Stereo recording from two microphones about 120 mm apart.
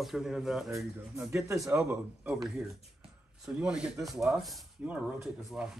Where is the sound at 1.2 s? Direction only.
25° right (ahead or behind).